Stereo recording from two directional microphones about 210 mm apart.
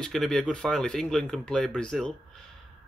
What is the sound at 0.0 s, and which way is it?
Speech, centre (ahead or behind).